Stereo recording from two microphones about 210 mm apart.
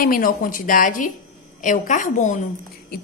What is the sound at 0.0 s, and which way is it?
A woman's voice, 40° left (ahead or behind).